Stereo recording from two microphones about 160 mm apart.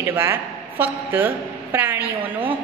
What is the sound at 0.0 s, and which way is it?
A woman's voice, 15° right (ahead or behind).